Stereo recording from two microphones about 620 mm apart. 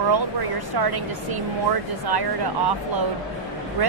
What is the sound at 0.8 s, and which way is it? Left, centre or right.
Speech, right.